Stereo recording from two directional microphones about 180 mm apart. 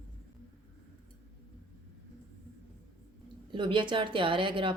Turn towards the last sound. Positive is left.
turn(degrees=-30)  # may be behind; listen again after turning